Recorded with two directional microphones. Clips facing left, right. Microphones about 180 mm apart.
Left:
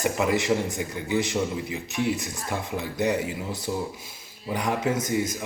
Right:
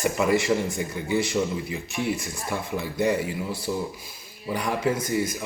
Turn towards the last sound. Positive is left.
turn(degrees=20)  # may be behind; listen again after turning